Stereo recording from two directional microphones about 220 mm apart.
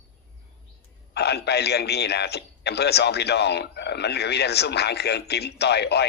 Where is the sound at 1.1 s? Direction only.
50° left (ahead or behind).